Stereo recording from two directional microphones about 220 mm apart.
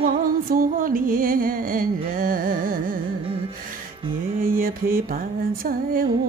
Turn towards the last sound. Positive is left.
turn(degrees=-40)  # may be behind; listen again after turning